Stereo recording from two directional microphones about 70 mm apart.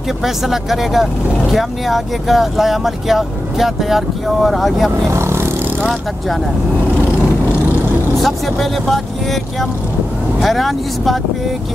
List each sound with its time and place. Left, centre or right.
0.2 s speech: centre
5.1 s vehicle: right
5.8 s speech: centre
8.2 s speech: centre